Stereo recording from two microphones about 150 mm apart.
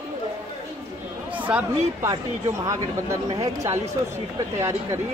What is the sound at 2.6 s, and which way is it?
Speech, 20° right (ahead or behind).